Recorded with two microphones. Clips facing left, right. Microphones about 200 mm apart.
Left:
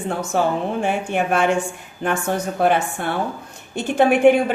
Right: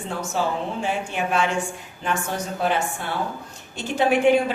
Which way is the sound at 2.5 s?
55° left (ahead or behind).